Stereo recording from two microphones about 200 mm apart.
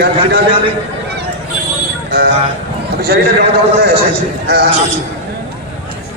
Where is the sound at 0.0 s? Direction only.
55° right (ahead or behind).